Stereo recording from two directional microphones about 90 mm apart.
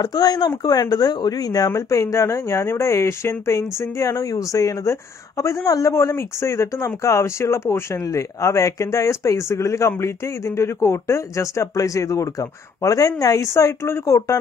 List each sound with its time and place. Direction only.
0.0 s speech: 50° left (ahead or behind)
1.7 s speech: 35° left (ahead or behind)